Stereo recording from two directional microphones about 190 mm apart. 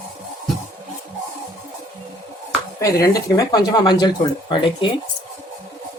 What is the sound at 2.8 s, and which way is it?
Speech, 20° left (ahead or behind).